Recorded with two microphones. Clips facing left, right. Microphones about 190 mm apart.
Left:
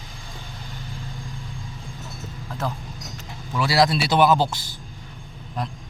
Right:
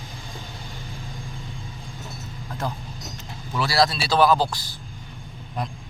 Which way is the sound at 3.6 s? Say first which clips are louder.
Left 2 dB; 15° left (ahead or behind).